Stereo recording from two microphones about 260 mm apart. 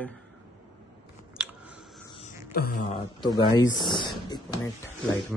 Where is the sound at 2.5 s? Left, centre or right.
Left.